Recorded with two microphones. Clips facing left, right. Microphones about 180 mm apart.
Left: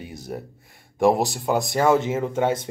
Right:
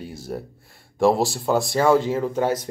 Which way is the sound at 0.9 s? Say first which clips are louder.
Even; 15° left (ahead or behind).